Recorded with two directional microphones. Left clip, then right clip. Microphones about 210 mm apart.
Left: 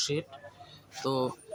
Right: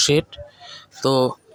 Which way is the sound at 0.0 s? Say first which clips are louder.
Right 14 dB; 35° right (ahead or behind).